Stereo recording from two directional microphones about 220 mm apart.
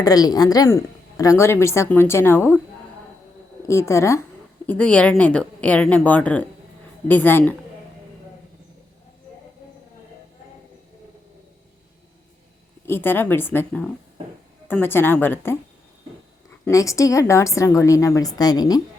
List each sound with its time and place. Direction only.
0.0 s speech: 15° left (ahead or behind)
3.7 s a woman's voice: 15° left (ahead or behind)
12.8 s speech: 10° left (ahead or behind)
16.6 s speech: 15° left (ahead or behind)